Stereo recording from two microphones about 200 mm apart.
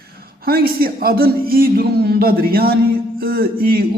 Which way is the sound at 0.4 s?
50° right (ahead or behind).